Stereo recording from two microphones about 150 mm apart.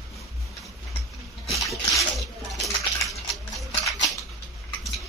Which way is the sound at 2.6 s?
Centre (ahead or behind).